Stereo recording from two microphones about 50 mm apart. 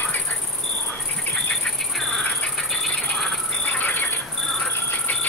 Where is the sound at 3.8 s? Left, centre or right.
Left.